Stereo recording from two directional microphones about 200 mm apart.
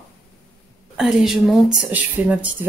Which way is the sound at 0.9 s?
Centre (ahead or behind).